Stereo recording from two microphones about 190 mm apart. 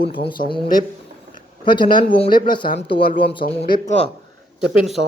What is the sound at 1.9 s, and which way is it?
Speech, 25° left (ahead or behind).